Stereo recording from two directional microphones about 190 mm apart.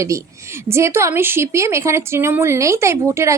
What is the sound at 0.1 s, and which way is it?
A woman's voice, 15° right (ahead or behind).